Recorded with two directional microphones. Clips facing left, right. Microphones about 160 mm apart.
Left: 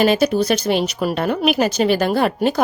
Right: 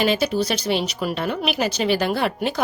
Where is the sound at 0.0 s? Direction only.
45° left (ahead or behind).